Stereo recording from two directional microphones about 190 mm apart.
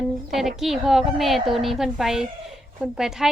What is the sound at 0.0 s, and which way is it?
A woman's voice, centre (ahead or behind).